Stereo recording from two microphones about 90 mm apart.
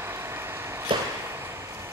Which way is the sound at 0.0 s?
30° right (ahead or behind).